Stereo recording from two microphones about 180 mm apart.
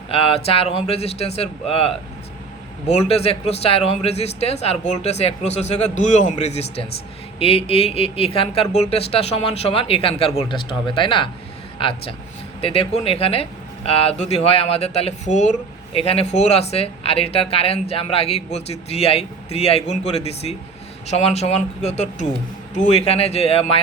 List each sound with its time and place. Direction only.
0.1 s a man's voice: 30° left (ahead or behind)